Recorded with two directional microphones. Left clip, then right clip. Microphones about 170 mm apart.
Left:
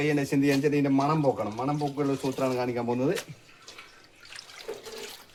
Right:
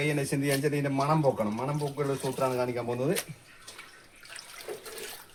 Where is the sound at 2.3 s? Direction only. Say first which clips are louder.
Left 1 dB; 50° left (ahead or behind).